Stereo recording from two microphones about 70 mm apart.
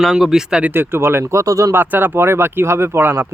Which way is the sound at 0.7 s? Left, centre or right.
Right.